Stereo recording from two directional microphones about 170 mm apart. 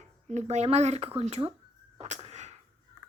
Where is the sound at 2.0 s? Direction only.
40° right (ahead or behind).